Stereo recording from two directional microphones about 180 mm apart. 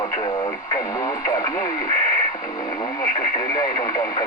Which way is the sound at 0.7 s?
20° left (ahead or behind).